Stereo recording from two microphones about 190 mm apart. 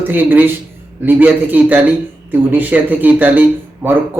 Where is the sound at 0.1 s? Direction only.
10° right (ahead or behind).